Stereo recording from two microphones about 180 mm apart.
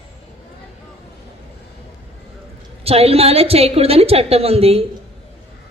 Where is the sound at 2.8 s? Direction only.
35° right (ahead or behind).